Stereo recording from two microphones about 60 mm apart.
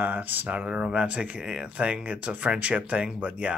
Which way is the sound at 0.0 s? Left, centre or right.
Right.